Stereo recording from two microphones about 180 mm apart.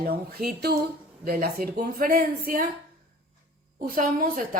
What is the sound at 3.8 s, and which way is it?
Speech, 50° right (ahead or behind).